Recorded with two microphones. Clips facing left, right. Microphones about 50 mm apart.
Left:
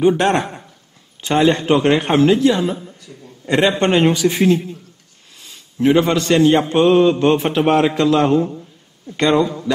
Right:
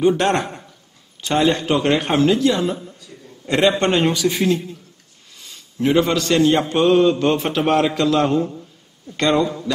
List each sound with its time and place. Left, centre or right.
0.2 s a man's voice: centre
1.2 s a man's voice: left; by 3.8 s centre
3.8 s a man's voice: left
5.9 s a man's voice: left
8.4 s a sound: centre
9.3 s a man's voice: centre